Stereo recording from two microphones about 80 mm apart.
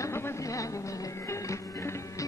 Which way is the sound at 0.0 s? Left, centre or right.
Left.